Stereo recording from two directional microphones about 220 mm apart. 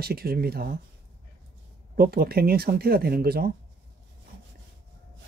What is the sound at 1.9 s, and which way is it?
Speech, 45° right (ahead or behind).